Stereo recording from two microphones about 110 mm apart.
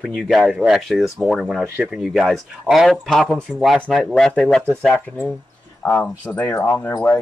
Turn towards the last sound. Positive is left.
turn(degrees=20)  # may be behind; listen again after turning